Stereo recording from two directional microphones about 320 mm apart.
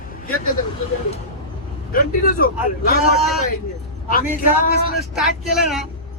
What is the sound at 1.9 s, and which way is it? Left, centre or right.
Speech, left.